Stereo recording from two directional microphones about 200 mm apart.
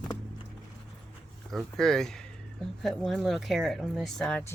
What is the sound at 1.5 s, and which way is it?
Speech, centre (ahead or behind).